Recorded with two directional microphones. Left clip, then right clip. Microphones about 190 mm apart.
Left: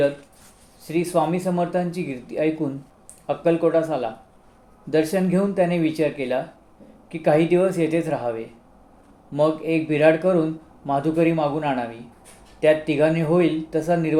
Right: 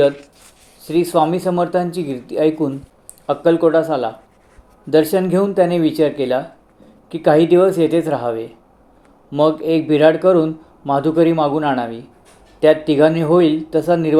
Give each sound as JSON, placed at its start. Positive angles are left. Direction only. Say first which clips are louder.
{"t": 0.8, "sound": "speech", "louder": "right 6 dB", "side_deg": -25}